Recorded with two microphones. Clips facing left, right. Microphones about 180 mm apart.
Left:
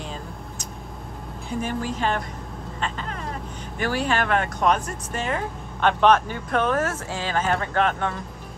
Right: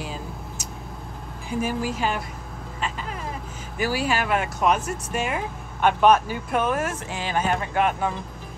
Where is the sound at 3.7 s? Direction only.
5° right (ahead or behind).